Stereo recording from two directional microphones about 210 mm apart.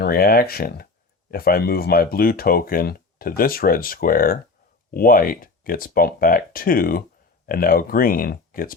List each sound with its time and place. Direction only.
0.0 s speech: 45° left (ahead or behind)